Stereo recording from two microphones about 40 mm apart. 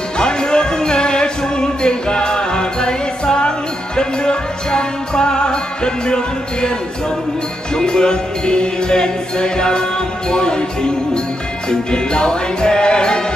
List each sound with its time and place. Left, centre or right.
0.2 s music: left
7.7 s music: centre